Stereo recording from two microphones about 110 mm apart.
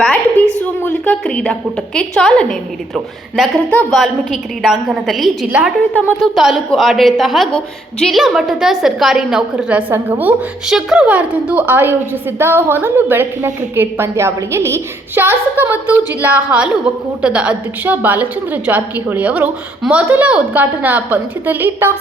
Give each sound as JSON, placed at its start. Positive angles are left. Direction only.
{"t": 0.0, "sound": "a sound", "side_deg": 10}
{"t": 2.0, "sound": "a woman's voice", "side_deg": 10}
{"t": 3.7, "sound": "a woman's voice", "side_deg": 10}
{"t": 4.0, "sound": "a woman's voice", "side_deg": -5}
{"t": 5.5, "sound": "a woman's voice", "side_deg": -15}
{"t": 6.3, "sound": "a woman's voice", "side_deg": 0}
{"t": 10.7, "sound": "a woman's voice", "side_deg": -5}